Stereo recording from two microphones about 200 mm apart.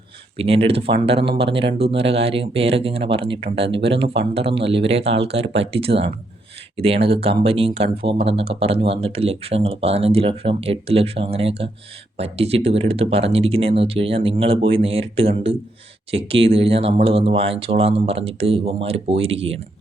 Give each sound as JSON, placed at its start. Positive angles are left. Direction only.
{"t": 0.3, "sound": "speech", "side_deg": -30}